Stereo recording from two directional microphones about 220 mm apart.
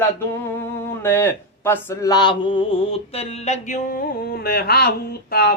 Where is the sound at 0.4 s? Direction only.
10° left (ahead or behind).